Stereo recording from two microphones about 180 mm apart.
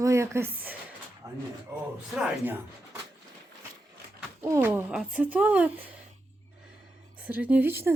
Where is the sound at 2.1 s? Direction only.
10° right (ahead or behind).